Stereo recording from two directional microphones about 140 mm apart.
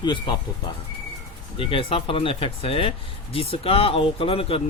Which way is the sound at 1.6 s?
40° left (ahead or behind).